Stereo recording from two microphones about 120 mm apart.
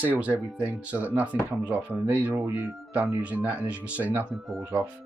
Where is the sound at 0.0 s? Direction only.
10° right (ahead or behind).